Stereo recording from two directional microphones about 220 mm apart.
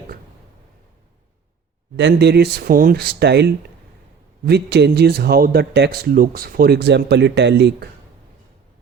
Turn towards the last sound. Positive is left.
turn(degrees=-50)  # may be behind; listen again after turning